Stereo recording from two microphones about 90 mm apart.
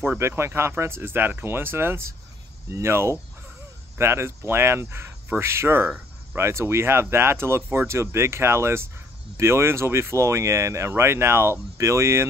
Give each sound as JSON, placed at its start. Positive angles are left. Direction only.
{"t": 0.0, "sound": "speech", "side_deg": -25}